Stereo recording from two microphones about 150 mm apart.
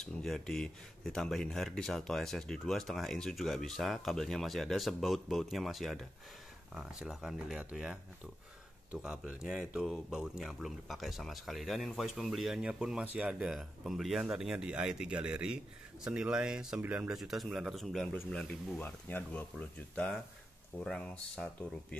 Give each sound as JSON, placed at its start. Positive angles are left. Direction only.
{"t": 0.0, "sound": "speech", "side_deg": 5}